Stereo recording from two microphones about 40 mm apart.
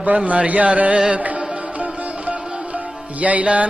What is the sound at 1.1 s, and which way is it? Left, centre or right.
Music, right.